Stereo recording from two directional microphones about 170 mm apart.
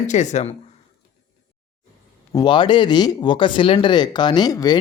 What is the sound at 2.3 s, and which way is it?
Speech, 25° left (ahead or behind).